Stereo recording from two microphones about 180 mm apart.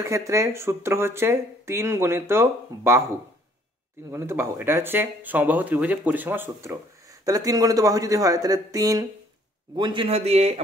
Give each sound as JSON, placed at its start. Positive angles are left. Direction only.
{"t": 0.0, "sound": "speech", "side_deg": -15}
{"t": 4.1, "sound": "a man's voice", "side_deg": -15}